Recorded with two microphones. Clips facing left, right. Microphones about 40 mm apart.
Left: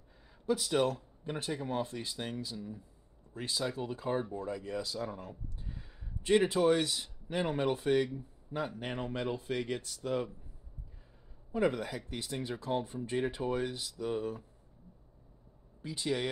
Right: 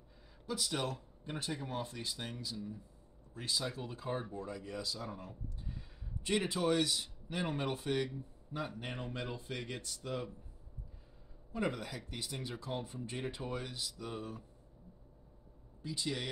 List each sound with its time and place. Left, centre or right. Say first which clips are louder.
0.5 s speech: left 8 dB; centre
5.7 s a sound: left 1 dB; centre
7.2 s speech: left 6 dB; centre
11.5 s speech: left 6 dB; centre
13.8 s speech: left 8 dB; centre
15.8 s speech: left 4 dB; left